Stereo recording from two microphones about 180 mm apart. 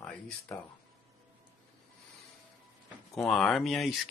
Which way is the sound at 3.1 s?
Centre (ahead or behind).